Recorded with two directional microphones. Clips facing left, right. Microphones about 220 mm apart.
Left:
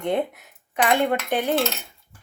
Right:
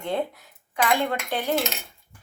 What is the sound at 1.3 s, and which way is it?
Cutlery, 20° left (ahead or behind).